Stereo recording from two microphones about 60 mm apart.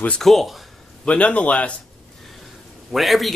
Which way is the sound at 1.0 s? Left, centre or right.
Left.